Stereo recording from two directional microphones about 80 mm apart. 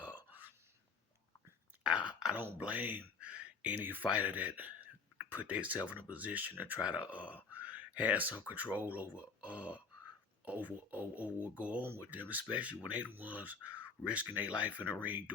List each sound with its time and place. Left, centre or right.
0.0 s burping: right
1.8 s a sound: centre
2.3 s speech: right